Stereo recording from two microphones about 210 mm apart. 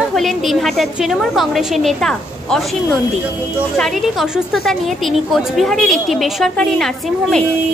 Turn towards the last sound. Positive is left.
turn(degrees=0)  # may be behind; listen again after turning